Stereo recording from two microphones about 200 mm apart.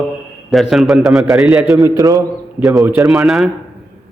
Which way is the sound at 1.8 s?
20° right (ahead or behind).